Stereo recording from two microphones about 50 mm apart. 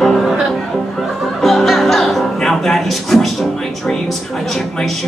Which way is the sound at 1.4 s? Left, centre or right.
Centre.